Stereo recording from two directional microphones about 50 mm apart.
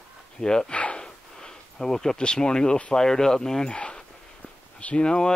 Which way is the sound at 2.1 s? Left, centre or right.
Centre.